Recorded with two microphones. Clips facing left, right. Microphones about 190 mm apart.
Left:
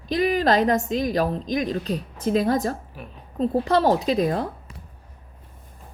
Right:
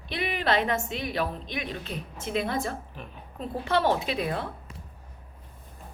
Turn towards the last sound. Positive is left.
turn(degrees=40)  # may be behind; listen again after turning